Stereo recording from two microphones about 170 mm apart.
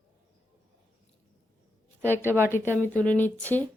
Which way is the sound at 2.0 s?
15° right (ahead or behind).